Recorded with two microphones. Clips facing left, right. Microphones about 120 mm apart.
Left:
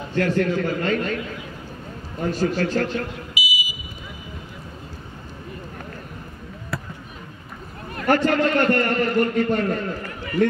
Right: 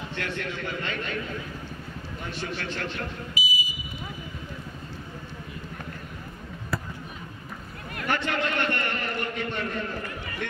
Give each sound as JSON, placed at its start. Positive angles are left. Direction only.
{"t": 0.1, "sound": "a man's voice", "side_deg": 40}
{"t": 2.1, "sound": "a man's voice", "side_deg": 40}
{"t": 3.3, "sound": "fire alarm", "side_deg": 10}
{"t": 6.7, "sound": "basketball bounce", "side_deg": 0}
{"t": 7.9, "sound": "a man's voice", "side_deg": 40}